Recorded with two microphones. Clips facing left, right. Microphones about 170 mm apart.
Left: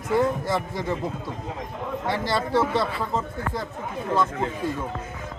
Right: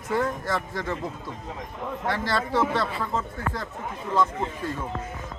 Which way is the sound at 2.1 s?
15° left (ahead or behind).